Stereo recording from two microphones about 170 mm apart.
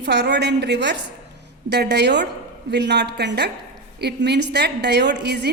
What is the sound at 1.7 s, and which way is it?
A woman's voice, 80° right.